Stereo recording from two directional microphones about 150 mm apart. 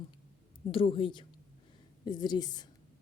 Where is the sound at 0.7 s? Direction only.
35° left (ahead or behind).